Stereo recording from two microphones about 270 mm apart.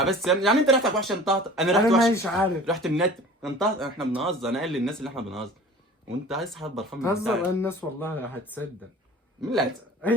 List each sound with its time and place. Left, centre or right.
0.0 s speech: centre